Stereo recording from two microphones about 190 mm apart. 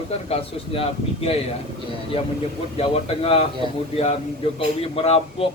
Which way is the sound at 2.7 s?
30° left (ahead or behind).